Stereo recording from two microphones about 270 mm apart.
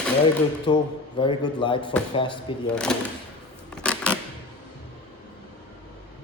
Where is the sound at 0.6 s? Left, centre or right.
Centre.